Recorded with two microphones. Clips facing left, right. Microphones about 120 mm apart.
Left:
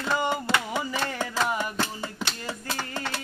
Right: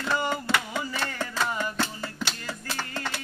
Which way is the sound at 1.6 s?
15° left (ahead or behind).